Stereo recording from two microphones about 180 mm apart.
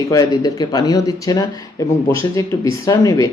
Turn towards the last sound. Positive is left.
turn(degrees=20)  # may be behind; listen again after turning